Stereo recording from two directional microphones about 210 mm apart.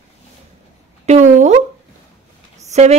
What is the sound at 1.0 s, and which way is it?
Speech, 35° right (ahead or behind).